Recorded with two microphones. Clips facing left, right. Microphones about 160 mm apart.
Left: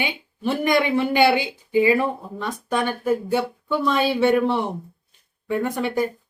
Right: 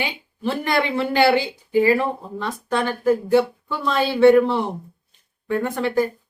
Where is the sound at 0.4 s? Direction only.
15° left (ahead or behind).